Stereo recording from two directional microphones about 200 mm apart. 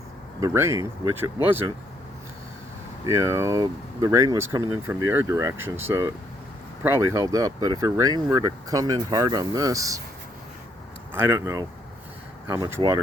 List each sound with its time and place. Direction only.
0.3 s speech: 15° right (ahead or behind)
3.1 s speech: 15° right (ahead or behind)
11.1 s speech: 10° right (ahead or behind)